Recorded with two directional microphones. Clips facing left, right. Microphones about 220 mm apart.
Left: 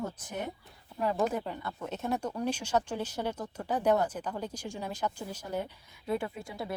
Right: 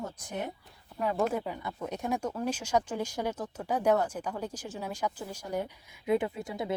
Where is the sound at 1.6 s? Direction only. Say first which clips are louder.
Right 1 dB; 15° right (ahead or behind).